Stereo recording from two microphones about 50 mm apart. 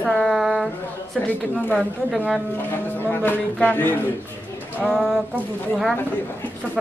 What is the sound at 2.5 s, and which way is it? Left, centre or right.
Speech, left.